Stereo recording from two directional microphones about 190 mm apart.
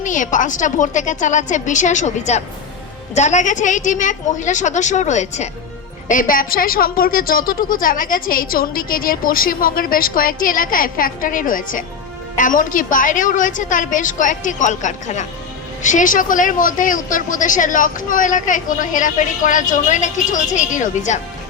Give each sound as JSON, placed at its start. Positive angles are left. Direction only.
{"t": 0.0, "sound": "a woman's voice", "side_deg": 40}